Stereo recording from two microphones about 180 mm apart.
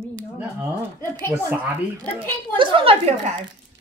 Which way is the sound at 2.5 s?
30° right (ahead or behind).